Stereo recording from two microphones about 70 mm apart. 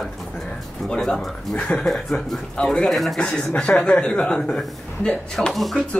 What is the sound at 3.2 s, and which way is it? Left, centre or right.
Speech, centre.